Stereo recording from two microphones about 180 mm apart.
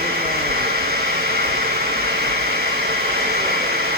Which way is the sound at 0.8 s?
60° right (ahead or behind).